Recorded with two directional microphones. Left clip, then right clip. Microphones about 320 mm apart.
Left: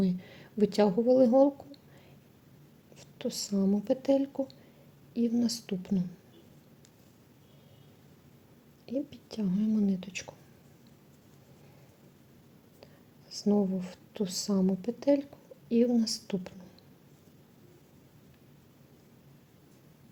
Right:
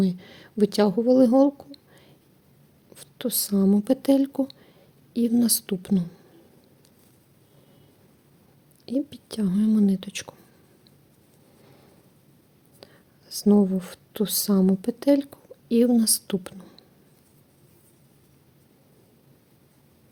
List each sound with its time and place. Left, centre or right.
0.0 s speech: centre
2.9 s speech: right
8.9 s speech: right
12.8 s speech: right